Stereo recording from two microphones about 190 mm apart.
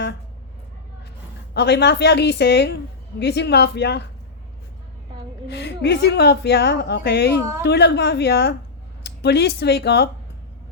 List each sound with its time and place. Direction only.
1.5 s a woman's voice: 60° left (ahead or behind)
5.5 s a woman's voice: 65° left (ahead or behind)